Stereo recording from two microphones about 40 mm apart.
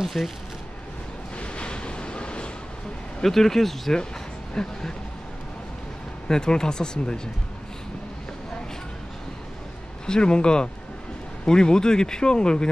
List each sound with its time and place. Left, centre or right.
0.0 s speech: centre
1.4 s train: left
3.2 s speech: centre
6.2 s speech: centre
10.0 s speech: left